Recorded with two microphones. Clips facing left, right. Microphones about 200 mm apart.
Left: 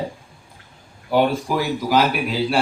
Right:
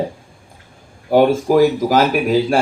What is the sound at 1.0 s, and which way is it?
Speech, 45° right (ahead or behind).